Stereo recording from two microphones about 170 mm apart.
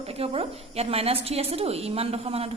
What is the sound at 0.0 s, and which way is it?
A woman's voice, 35° right (ahead or behind).